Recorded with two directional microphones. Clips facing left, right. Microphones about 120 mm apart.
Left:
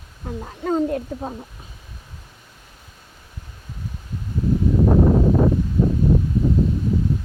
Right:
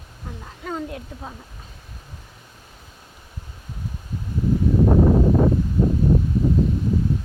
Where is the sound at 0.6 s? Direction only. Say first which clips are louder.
Left 9 dB; 40° left (ahead or behind).